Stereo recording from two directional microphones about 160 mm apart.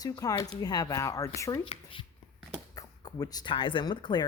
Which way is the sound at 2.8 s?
25° left (ahead or behind).